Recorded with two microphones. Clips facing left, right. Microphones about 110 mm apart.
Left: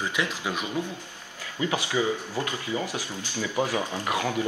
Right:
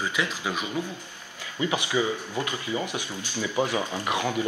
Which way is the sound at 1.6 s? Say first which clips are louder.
Even; 20° right (ahead or behind).